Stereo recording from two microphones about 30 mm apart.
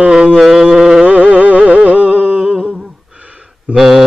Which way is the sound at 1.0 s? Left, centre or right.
Right.